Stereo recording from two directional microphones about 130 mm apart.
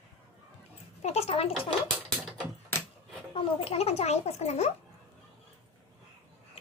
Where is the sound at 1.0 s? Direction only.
55° left (ahead or behind).